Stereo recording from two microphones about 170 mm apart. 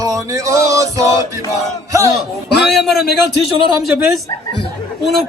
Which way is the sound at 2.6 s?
Centre (ahead or behind).